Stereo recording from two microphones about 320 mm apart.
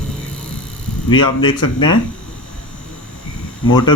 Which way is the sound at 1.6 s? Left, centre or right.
Left.